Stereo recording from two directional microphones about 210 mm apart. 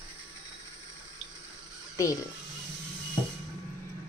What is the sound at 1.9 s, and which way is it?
Speech, 15° left (ahead or behind).